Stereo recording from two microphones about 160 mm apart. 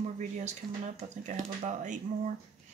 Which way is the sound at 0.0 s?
45° right (ahead or behind).